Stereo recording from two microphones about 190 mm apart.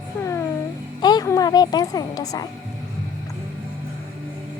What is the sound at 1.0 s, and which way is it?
A woman's voice, 20° left (ahead or behind).